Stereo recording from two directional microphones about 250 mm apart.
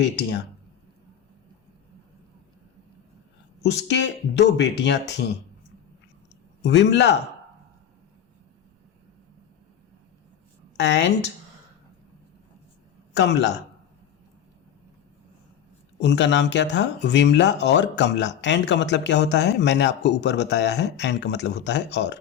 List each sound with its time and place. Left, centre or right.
0.0 s speech: left
3.6 s speech: left
6.6 s speech: left
10.8 s a woman's voice: left
13.1 s speech: left
16.0 s speech: left